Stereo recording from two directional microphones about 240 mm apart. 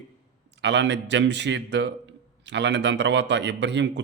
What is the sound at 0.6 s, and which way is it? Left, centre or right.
A man's voice, right.